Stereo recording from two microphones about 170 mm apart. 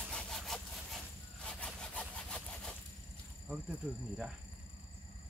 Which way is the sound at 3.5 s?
5° right (ahead or behind).